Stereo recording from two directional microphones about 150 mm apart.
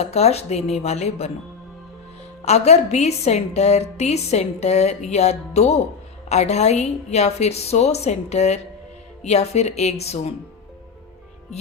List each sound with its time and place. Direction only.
0.0 s a woman's voice: 45° left (ahead or behind)
2.4 s a woman's voice: 45° left (ahead or behind)